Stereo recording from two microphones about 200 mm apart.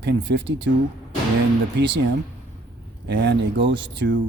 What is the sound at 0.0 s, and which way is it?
Speech, 60° right (ahead or behind).